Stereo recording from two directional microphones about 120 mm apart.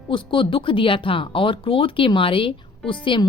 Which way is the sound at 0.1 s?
45° left (ahead or behind).